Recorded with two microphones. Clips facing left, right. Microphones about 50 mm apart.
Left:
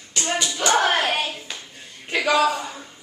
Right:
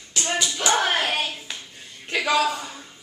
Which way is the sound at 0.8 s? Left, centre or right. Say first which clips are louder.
Left 2 dB; left.